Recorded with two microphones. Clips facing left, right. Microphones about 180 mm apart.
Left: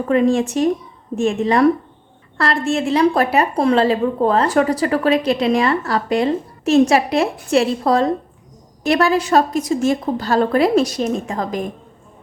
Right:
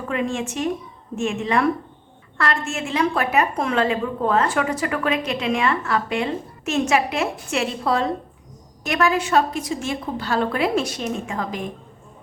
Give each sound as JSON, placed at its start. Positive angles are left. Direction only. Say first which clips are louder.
{"t": 0.1, "sound": "a woman's voice", "louder": "left 9 dB", "side_deg": 35}